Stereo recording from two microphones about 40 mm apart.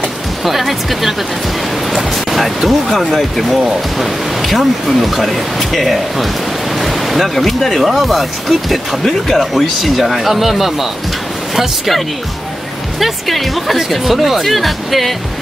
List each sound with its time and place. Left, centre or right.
0.4 s speech: centre
2.3 s speech: centre
13.0 s speech: centre